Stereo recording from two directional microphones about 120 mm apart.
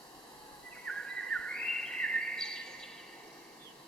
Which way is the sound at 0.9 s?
5° left (ahead or behind).